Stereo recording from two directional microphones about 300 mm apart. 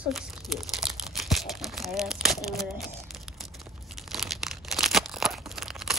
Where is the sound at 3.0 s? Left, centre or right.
Centre.